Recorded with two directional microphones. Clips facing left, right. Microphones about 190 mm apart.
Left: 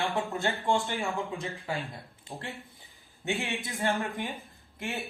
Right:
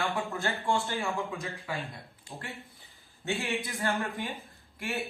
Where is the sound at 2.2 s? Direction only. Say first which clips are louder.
Left 2 dB; 20° left (ahead or behind).